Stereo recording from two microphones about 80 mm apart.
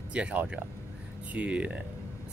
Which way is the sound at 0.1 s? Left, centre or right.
Centre.